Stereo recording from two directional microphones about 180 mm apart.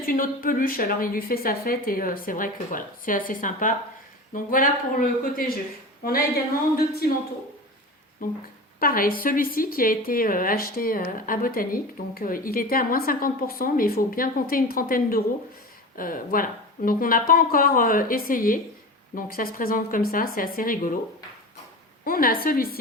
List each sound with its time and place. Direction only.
0.0 s a woman's voice: 50° left (ahead or behind)
8.2 s a woman's voice: 50° left (ahead or behind)
22.0 s a woman's voice: 55° left (ahead or behind)